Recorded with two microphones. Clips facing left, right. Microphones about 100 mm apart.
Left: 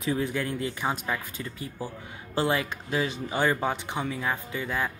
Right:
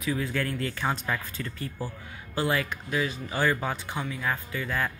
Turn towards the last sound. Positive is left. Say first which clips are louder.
# even
turn(degrees=20)  # may be behind; listen again after turning